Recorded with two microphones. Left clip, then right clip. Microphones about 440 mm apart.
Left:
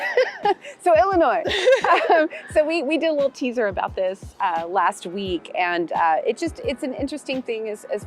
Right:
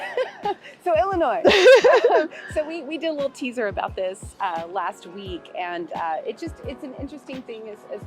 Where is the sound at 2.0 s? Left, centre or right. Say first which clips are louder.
Left 1 dB; left.